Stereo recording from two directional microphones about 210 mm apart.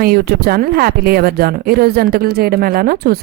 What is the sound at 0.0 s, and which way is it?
A woman's voice, 45° right (ahead or behind).